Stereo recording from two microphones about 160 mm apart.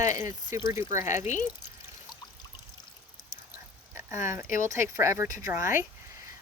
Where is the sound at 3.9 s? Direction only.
15° right (ahead or behind).